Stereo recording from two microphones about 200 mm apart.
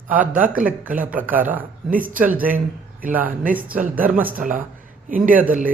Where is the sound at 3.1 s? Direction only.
10° right (ahead or behind).